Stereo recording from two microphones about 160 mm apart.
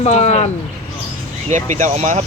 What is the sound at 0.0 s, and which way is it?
Speech, 45° left (ahead or behind).